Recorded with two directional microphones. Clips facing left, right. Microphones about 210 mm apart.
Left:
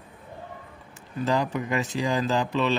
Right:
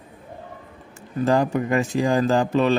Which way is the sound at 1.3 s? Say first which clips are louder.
Right 6 dB; 50° right (ahead or behind).